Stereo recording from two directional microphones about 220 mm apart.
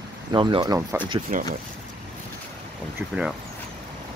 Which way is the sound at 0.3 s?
20° right (ahead or behind).